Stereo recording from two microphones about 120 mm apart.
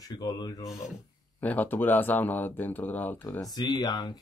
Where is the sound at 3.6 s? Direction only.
35° left (ahead or behind).